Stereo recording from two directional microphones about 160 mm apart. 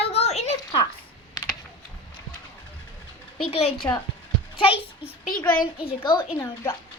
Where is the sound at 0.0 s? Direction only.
40° left (ahead or behind).